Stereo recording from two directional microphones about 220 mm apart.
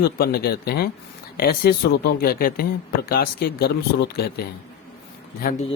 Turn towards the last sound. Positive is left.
turn(degrees=40)  # may be behind; listen again after turning